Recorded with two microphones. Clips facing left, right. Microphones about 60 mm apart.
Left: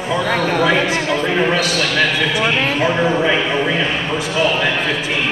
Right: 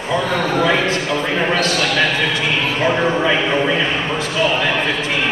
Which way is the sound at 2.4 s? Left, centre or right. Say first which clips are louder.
Left 2 dB; left.